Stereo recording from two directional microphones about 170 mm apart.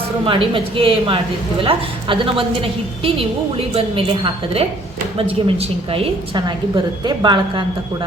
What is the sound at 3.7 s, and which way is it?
A man's voice, 30° right (ahead or behind).